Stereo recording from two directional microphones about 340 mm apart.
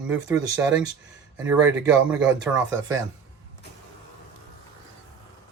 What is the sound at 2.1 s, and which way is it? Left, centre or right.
Speech, centre.